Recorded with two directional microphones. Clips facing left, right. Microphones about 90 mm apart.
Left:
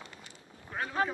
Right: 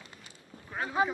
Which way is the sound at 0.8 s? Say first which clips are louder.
Right 3 dB; 10° right (ahead or behind).